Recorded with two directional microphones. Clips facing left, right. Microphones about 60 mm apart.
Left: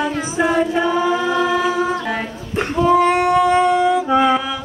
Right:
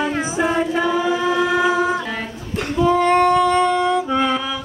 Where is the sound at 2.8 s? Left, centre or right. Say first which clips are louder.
Even; centre.